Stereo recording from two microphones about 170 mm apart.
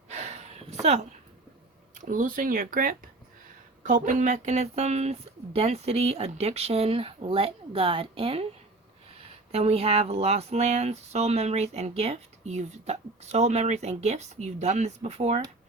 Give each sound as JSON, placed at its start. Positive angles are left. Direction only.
{"t": 0.1, "sound": "a sound", "side_deg": -40}
{"t": 2.0, "sound": "speech", "side_deg": -50}
{"t": 9.5, "sound": "speech", "side_deg": -40}